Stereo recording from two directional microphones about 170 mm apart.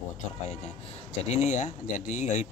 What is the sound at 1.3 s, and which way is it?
Speech, 40° left (ahead or behind).